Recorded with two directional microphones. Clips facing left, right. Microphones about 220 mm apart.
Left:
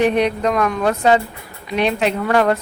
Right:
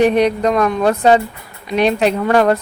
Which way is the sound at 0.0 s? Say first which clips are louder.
Right 3 dB; 40° right (ahead or behind).